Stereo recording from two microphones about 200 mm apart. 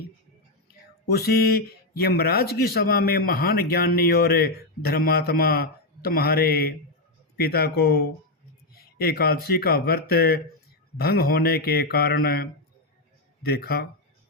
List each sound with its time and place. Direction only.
1.3 s speech: 50° left (ahead or behind)